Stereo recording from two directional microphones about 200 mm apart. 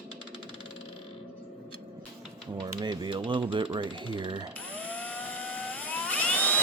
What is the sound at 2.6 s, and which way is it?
Speech, 20° right (ahead or behind).